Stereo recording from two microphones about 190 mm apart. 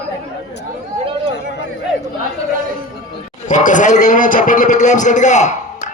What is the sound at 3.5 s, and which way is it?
A man's voice, 40° left (ahead or behind).